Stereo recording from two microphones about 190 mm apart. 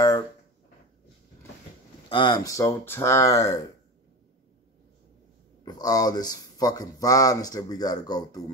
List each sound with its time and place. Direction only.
2.0 s speech: 25° left (ahead or behind)
5.7 s speech: 20° left (ahead or behind)